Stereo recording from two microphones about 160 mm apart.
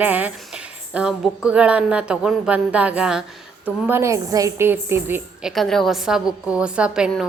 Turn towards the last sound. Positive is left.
turn(degrees=-5)  # may be behind; listen again after turning